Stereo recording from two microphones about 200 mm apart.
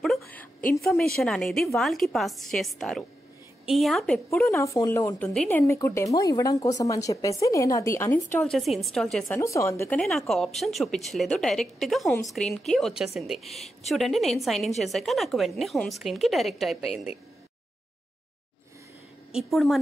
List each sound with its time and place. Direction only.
0.0 s a sound: 5° left (ahead or behind)
0.7 s a woman's voice: centre (ahead or behind)
4.5 s speech: 15° left (ahead or behind)
9.4 s speech: 15° left (ahead or behind)
9.9 s a woman's voice: centre (ahead or behind)
19.3 s a woman's voice: centre (ahead or behind)